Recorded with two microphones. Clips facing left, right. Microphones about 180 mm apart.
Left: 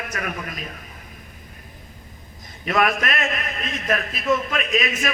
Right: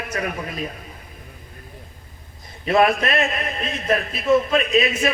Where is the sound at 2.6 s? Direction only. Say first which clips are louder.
Right 4 dB; 30° right (ahead or behind).